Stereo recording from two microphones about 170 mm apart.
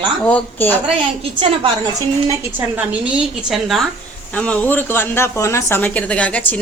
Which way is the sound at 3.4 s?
Centre (ahead or behind).